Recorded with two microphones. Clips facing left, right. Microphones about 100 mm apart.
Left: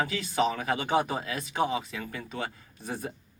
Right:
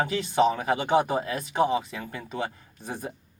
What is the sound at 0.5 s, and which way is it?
Speech, 25° right (ahead or behind).